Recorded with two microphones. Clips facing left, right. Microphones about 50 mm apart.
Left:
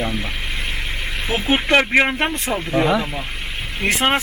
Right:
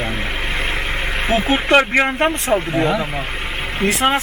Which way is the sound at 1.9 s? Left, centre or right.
Centre.